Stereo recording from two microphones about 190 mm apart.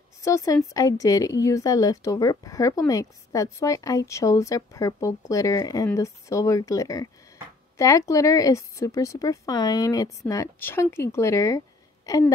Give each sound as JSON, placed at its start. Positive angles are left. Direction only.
{"t": 0.2, "sound": "speech", "side_deg": 15}